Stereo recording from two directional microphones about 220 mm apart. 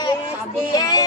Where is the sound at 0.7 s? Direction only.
15° left (ahead or behind).